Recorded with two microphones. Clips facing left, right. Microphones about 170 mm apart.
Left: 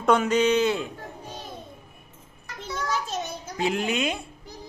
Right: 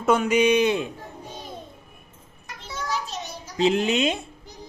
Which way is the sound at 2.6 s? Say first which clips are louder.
Left 1 dB; 50° left (ahead or behind).